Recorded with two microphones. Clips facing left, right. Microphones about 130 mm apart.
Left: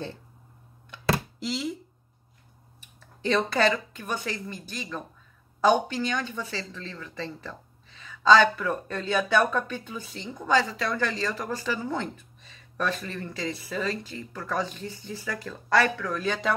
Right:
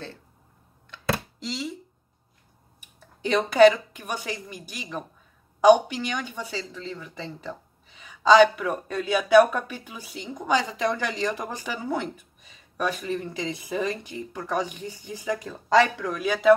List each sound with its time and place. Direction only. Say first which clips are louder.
1.4 s speech: left 2 dB; 5° left (ahead or behind)
2.8 s speech: right 1 dB; 15° right (ahead or behind)